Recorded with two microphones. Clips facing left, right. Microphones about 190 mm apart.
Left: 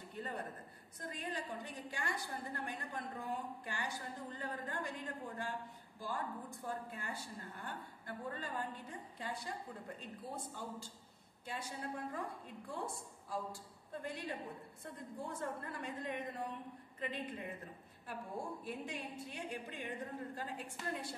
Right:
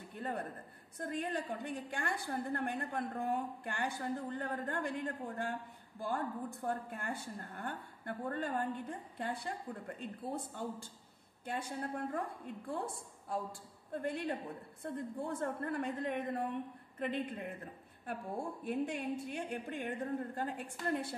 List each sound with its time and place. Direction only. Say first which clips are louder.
0.1 s a sound: right 4 dB; 55° right (ahead or behind)
0.9 s a woman's voice: right 6 dB; 55° right (ahead or behind)
18.6 s speech: right 7 dB; 50° right (ahead or behind)